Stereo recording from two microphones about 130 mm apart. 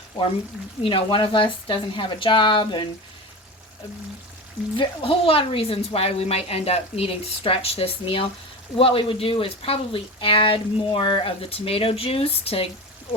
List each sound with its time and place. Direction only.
0.8 s speech: 40° left (ahead or behind)
4.8 s speech: 45° left (ahead or behind)